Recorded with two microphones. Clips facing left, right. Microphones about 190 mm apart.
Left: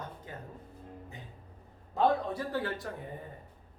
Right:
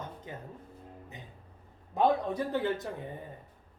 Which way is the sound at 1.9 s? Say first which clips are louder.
Right 1 dB; 20° right (ahead or behind).